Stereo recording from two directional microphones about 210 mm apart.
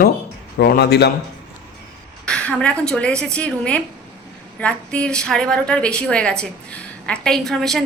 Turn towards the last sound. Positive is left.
turn(degrees=0)  # may be behind; listen again after turning